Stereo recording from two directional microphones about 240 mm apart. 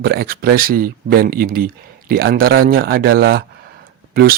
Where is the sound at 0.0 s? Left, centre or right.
Right.